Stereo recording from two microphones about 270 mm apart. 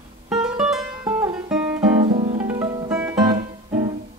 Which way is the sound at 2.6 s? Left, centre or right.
Centre.